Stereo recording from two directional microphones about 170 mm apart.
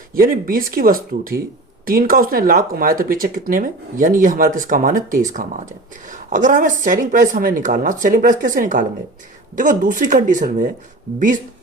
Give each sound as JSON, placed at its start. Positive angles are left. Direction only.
{"t": 0.1, "sound": "speech", "side_deg": -55}